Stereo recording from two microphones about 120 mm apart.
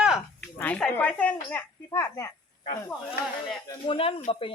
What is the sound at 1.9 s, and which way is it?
Speech, 25° left (ahead or behind).